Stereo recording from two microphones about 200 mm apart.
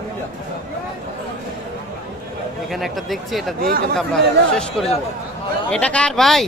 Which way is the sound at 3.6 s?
45° right (ahead or behind).